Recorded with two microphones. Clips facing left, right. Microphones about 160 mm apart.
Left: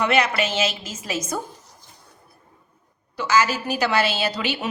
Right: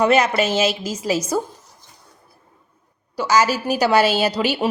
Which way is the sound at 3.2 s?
40° right (ahead or behind).